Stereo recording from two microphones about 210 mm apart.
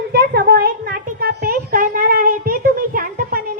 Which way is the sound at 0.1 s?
50° right (ahead or behind).